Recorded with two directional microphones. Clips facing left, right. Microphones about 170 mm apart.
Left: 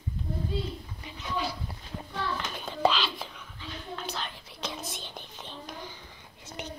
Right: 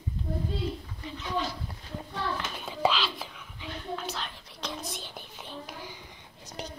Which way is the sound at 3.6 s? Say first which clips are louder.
Right 2 dB; 15° right (ahead or behind).